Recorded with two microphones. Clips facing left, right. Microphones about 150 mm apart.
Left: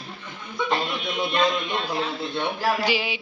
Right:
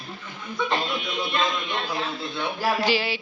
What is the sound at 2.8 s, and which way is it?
Speech, 15° left (ahead or behind).